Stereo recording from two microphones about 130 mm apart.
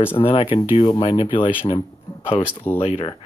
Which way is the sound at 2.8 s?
55° left (ahead or behind).